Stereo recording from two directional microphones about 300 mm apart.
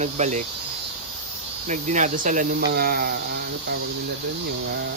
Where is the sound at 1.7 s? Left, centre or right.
Right.